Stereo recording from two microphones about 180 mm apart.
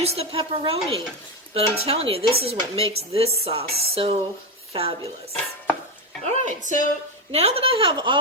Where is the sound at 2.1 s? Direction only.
35° right (ahead or behind).